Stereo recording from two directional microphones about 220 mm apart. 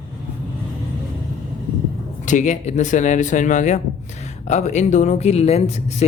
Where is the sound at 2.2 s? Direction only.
35° left (ahead or behind).